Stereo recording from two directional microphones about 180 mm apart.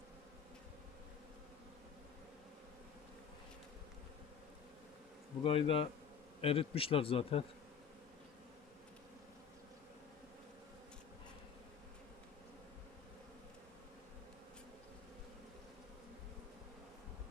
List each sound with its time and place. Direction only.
5.4 s speech: 30° left (ahead or behind)